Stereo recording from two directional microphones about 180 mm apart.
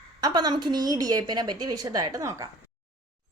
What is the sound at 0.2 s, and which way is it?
A woman's voice, 20° right (ahead or behind).